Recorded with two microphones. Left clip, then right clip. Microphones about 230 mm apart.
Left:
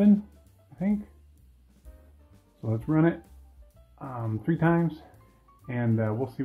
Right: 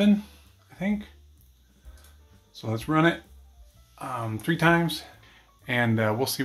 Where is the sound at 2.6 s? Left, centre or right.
Centre.